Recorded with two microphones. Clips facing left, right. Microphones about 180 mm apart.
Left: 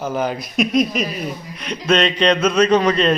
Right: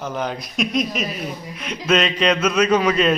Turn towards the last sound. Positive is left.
turn(degrees=-5)  # may be behind; listen again after turning